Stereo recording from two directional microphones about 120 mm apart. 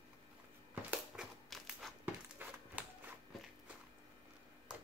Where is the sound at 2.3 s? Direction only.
15° right (ahead or behind).